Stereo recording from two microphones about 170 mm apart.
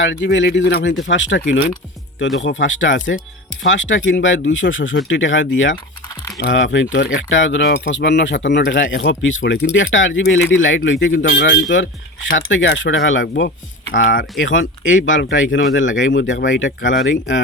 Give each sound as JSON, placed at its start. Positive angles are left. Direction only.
{"t": 0.0, "sound": "speech", "side_deg": 90}
{"t": 1.5, "sound": "speech", "side_deg": 50}
{"t": 2.1, "sound": "speech", "side_deg": 90}
{"t": 11.7, "sound": "speech", "side_deg": 90}